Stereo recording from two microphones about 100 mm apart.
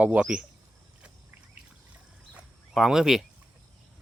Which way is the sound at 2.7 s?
5° right (ahead or behind).